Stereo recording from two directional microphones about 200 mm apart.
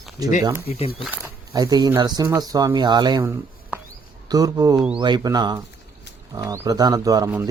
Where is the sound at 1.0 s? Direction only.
5° right (ahead or behind).